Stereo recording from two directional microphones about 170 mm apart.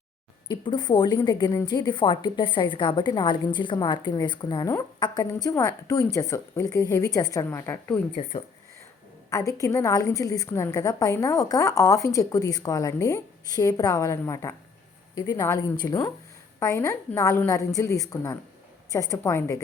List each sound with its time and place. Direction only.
0.4 s a woman's voice: 25° left (ahead or behind)
8.3 s a woman's voice: 30° left (ahead or behind)
9.3 s a woman's voice: 20° left (ahead or behind)